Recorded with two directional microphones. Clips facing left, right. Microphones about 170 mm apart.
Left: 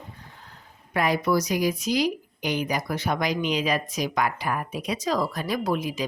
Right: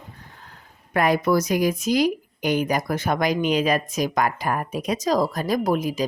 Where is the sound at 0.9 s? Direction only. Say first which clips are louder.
Right 3 dB; 50° right (ahead or behind).